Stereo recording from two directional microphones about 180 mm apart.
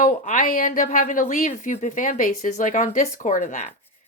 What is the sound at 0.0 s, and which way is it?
A woman's voice, 45° left (ahead or behind).